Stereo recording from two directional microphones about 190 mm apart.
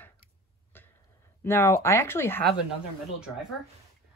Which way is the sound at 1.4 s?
10° left (ahead or behind).